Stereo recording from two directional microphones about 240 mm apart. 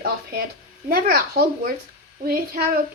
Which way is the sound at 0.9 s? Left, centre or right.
Right.